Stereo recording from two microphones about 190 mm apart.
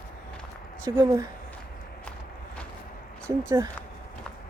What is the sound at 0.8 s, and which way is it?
Speech, 15° right (ahead or behind).